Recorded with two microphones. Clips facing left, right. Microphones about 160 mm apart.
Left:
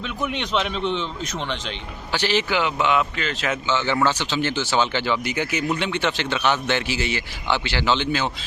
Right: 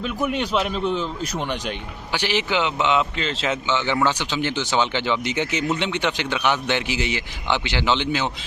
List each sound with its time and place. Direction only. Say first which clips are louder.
0.0 s a man's voice: right 3 dB; 5° right (ahead or behind)